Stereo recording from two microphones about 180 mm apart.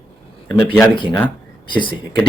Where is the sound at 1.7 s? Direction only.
25° left (ahead or behind).